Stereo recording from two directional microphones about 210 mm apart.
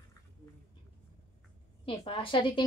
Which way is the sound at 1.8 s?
25° left (ahead or behind).